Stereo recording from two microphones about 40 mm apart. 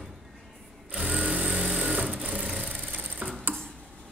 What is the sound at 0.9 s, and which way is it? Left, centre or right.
Sewing machine, right.